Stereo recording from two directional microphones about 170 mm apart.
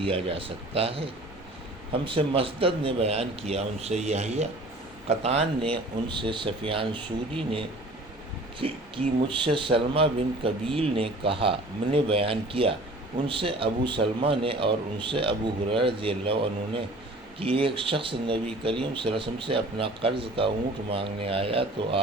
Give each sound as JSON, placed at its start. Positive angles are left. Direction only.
{"t": 0.0, "sound": "speech", "side_deg": -35}
{"t": 8.6, "sound": "speech", "side_deg": -35}